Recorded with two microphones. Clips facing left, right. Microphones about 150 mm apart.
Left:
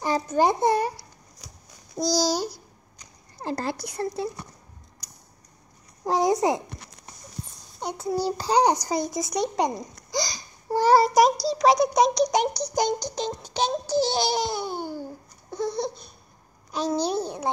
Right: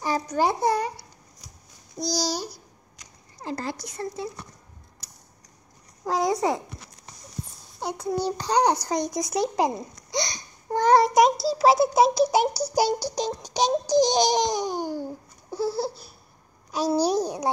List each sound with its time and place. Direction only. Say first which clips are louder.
0.0 s a child's voice: left 2 dB; 25° left (ahead or behind)
2.0 s a child's voice: left 4 dB; 60° left (ahead or behind)
3.4 s speech: left 2 dB; 30° left (ahead or behind)
6.0 s speech: left 2 dB; 20° left (ahead or behind)
7.8 s a child's voice: even; centre (ahead or behind); by 14.4 s 15° right (ahead or behind)
14.5 s babbling: right 3 dB; 15° right (ahead or behind)
16.7 s a child's voice: right 3 dB; 10° right (ahead or behind)